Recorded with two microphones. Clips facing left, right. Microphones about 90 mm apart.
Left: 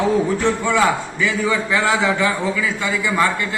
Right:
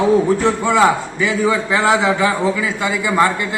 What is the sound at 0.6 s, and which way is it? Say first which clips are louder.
A man's voice: right 6 dB; 20° right (ahead or behind).